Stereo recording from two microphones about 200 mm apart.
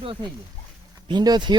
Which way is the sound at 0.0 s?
25° right (ahead or behind).